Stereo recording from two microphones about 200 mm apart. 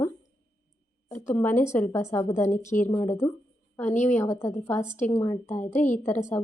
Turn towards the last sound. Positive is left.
turn(degrees=15)  # may be behind; listen again after turning